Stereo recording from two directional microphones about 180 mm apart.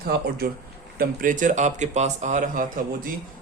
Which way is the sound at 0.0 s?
60° right (ahead or behind).